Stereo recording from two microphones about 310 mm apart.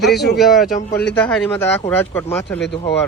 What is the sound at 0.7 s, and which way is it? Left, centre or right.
Speech, left.